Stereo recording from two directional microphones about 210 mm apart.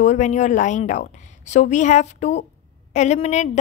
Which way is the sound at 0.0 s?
35° left (ahead or behind).